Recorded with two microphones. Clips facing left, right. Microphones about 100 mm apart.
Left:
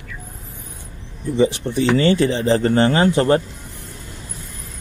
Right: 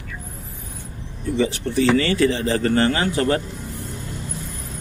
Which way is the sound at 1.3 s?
20° left (ahead or behind).